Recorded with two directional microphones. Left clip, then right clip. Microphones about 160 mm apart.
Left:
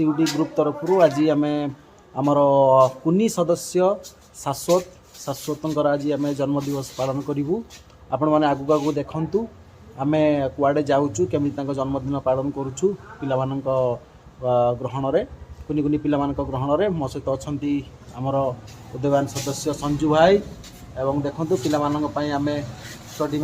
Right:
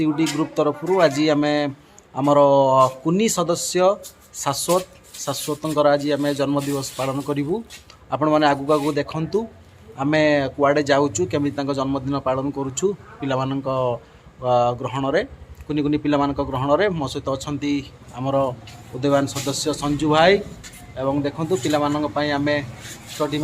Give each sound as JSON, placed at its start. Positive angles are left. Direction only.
{"t": 0.0, "sound": "a man's voice", "side_deg": -10}
{"t": 6.6, "sound": "a man's voice", "side_deg": -25}